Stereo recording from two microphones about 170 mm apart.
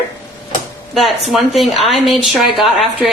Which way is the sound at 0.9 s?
Centre (ahead or behind).